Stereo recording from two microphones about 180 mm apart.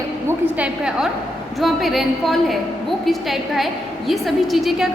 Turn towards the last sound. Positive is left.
turn(degrees=0)  # may be behind; listen again after turning